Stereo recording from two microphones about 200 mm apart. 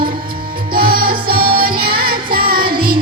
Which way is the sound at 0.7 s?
45° right (ahead or behind).